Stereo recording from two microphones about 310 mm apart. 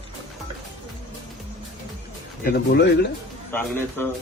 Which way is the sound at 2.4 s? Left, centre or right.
Left.